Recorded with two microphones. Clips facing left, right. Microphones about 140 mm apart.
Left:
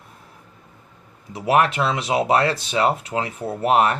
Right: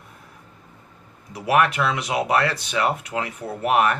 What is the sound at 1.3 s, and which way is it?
Speech, 30° left (ahead or behind).